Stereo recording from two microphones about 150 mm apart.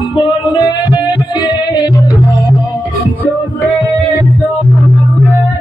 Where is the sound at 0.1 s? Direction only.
30° left (ahead or behind).